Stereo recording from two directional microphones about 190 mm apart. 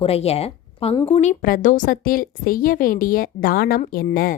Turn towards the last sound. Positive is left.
turn(degrees=50)  # may be behind; listen again after turning